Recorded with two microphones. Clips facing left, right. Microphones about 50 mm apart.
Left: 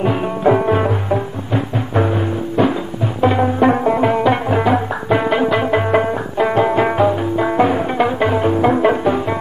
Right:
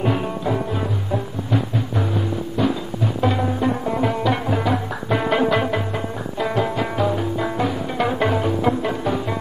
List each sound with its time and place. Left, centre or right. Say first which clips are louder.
0.4 s music: left 9 dB; left
2.6 s music: left 5 dB; left
3.2 s music: left 7 dB; left
3.5 s music: left 8 dB; left
5.2 s music: right 1 dB; centre
6.3 s music: left 7 dB; left
8.0 s music: left 2 dB; centre
8.5 s music: left 7 dB; left